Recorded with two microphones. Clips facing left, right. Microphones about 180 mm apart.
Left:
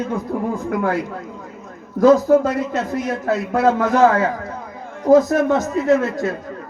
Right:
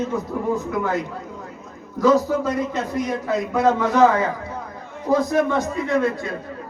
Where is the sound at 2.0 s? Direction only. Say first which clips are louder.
Left 5 dB; 50° left (ahead or behind).